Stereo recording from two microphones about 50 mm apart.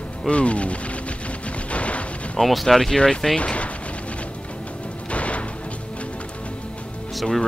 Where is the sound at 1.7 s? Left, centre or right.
Left.